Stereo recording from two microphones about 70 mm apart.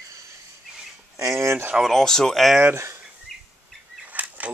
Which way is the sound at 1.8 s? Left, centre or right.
Centre.